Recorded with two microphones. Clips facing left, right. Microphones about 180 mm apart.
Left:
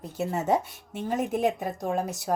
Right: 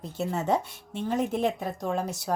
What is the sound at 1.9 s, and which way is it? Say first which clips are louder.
Speech: left 2 dB; centre (ahead or behind).